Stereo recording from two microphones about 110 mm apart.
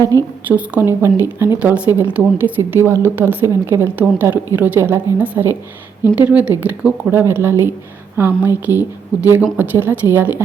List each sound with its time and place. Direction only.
0.4 s speech: 15° right (ahead or behind)